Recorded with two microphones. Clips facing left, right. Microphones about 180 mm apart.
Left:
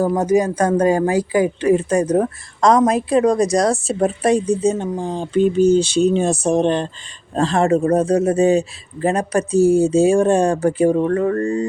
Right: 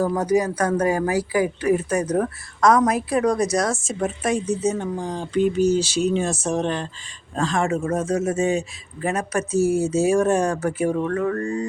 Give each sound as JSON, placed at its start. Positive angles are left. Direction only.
{"t": 0.3, "sound": "a woman's voice", "side_deg": 30}